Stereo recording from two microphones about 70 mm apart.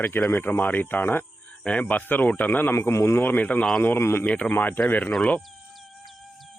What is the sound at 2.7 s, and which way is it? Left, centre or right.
Speech, left.